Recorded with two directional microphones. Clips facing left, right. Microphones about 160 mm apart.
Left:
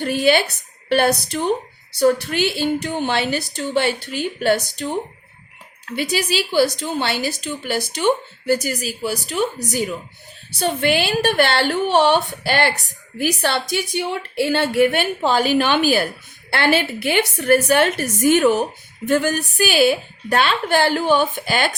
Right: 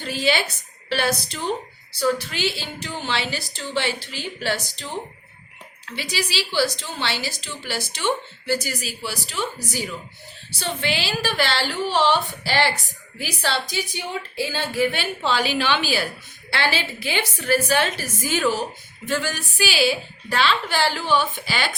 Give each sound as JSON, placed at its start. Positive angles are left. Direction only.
{"t": 0.0, "sound": "a woman's voice", "side_deg": 55}
{"t": 6.0, "sound": "a woman's voice", "side_deg": 55}